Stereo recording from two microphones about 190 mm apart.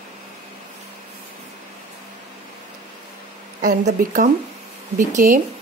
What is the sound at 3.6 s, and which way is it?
Speech, 45° right (ahead or behind).